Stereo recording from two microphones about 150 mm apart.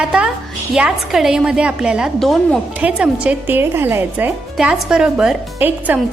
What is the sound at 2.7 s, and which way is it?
A woman's voice, 10° right (ahead or behind).